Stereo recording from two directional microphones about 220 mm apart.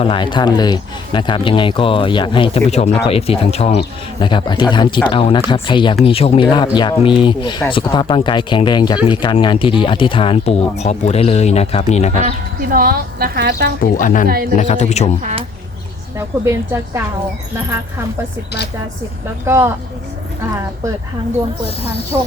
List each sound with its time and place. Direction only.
0.0 s speech: 20° left (ahead or behind)
12.7 s a woman's voice: 45° right (ahead or behind)
13.8 s speech: 35° left (ahead or behind)
15.2 s speech: 35° right (ahead or behind)
16.1 s a woman's voice: 10° right (ahead or behind)
19.5 s a woman's voice: 10° right (ahead or behind)
22.1 s a woman's voice: 15° right (ahead or behind)